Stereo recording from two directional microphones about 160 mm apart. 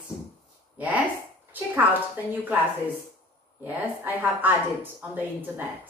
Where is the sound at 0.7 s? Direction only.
10° right (ahead or behind).